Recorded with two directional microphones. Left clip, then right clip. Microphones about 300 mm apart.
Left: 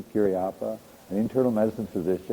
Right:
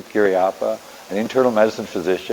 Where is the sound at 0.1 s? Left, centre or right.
Centre.